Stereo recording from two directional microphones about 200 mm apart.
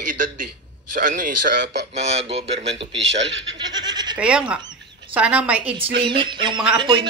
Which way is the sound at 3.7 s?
20° right (ahead or behind).